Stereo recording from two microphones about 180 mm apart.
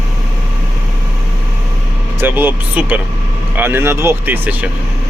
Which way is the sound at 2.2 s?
10° right (ahead or behind).